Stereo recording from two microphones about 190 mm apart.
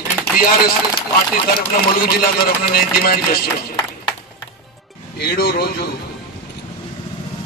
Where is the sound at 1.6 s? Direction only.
50° left (ahead or behind).